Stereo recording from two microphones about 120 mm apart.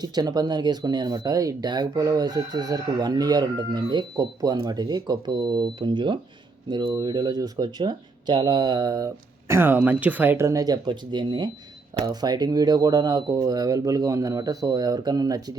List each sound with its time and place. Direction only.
0.0 s speech: 35° right (ahead or behind)
9.5 s speech: 20° right (ahead or behind)